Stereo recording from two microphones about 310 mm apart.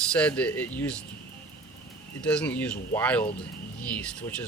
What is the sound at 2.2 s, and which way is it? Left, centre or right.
Speech, centre.